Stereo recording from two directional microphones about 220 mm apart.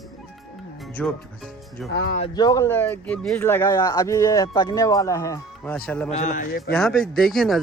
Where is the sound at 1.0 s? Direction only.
5° left (ahead or behind).